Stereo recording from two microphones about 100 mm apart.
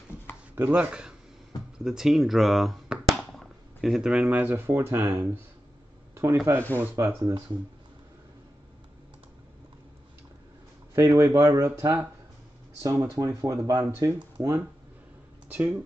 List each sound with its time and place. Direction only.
0.7 s speech: 10° right (ahead or behind); by 7.4 s 30° right (ahead or behind)
11.0 s speech: 30° right (ahead or behind)
15.4 s speech: 15° right (ahead or behind)